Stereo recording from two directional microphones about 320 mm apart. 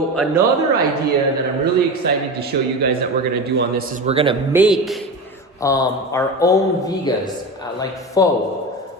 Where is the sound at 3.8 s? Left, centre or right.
Right.